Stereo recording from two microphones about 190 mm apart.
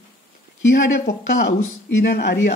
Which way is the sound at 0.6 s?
75° left (ahead or behind).